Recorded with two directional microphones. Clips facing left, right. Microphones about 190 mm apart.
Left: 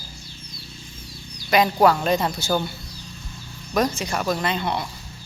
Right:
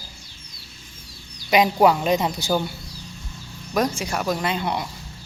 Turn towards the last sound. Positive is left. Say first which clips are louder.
# even
turn(degrees=-10)  # may be behind; listen again after turning